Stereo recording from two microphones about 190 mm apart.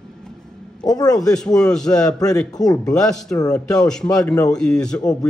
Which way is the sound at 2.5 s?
20° left (ahead or behind).